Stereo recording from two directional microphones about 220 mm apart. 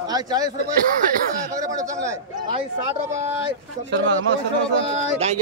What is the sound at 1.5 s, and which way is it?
Speech, 15° right (ahead or behind).